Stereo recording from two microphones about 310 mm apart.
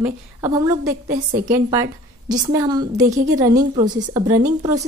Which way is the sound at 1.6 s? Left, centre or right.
Centre.